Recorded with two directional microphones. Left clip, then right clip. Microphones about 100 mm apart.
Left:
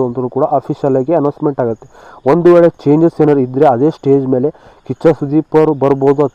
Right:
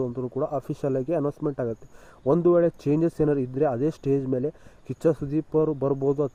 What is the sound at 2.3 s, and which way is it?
Speech, 10° right (ahead or behind).